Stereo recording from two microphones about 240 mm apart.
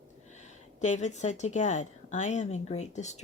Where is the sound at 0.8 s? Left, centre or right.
Left.